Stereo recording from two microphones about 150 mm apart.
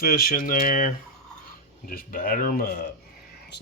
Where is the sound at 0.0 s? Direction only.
80° left.